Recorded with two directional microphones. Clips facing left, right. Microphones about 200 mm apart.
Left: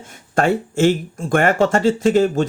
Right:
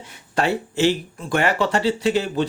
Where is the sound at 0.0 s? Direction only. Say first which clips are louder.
Left 4 dB; 50° left (ahead or behind).